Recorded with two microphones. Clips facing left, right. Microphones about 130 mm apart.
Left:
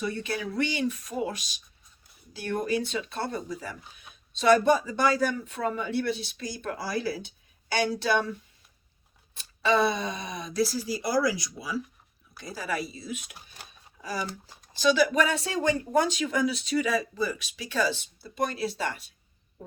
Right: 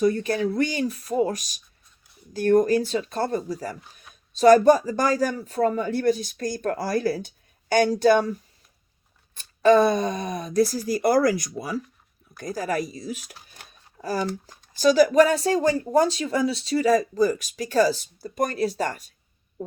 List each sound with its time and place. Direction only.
0.0 s speech: 40° right (ahead or behind)
9.4 s speech: 45° right (ahead or behind)